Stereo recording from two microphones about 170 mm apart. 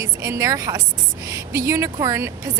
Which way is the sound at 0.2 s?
20° right (ahead or behind).